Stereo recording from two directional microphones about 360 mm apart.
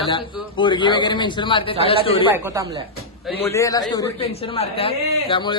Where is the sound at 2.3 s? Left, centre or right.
Centre.